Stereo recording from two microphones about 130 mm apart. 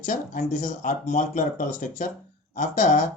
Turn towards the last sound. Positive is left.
turn(degrees=70)  # may be behind; listen again after turning